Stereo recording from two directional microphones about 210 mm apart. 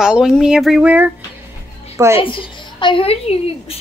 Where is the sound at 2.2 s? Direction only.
25° left (ahead or behind).